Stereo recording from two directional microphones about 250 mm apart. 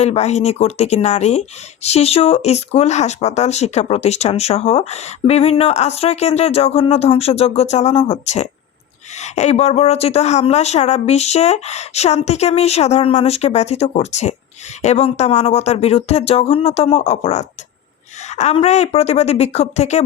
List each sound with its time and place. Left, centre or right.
0.0 s speech: left